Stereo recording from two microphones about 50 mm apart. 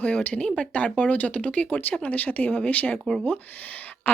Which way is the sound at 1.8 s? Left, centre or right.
Left.